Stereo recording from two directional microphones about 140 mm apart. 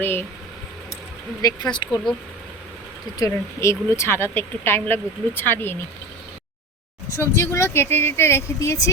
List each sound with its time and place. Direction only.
0.0 s speech: 15° left (ahead or behind)
1.4 s speech: 25° left (ahead or behind)
3.2 s speech: 20° left (ahead or behind)
7.2 s speech: 20° left (ahead or behind)